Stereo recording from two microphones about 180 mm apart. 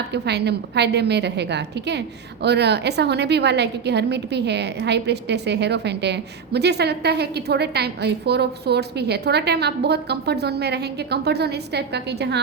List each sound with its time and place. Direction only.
0.1 s a woman's voice: 65° right (ahead or behind)